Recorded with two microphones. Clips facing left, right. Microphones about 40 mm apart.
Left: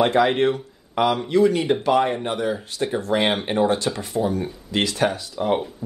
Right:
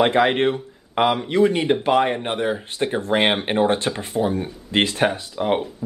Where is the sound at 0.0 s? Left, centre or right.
Right.